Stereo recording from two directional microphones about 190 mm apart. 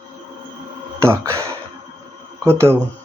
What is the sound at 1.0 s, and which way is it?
Speech, 15° right (ahead or behind).